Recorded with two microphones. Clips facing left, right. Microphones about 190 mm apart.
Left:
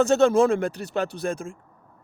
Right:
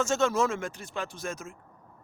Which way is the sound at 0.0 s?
35° left (ahead or behind).